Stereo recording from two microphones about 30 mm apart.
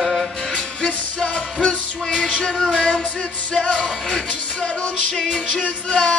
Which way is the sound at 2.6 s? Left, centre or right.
Centre.